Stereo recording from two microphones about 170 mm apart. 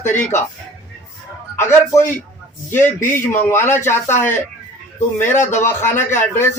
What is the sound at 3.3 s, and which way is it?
Speech, 15° left (ahead or behind).